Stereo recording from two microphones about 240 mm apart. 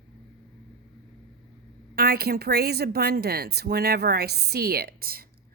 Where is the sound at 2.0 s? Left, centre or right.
Right.